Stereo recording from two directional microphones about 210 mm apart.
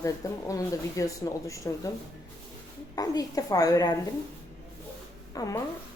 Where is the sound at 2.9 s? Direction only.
15° left (ahead or behind).